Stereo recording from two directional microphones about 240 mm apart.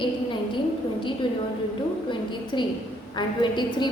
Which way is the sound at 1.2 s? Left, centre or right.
Left.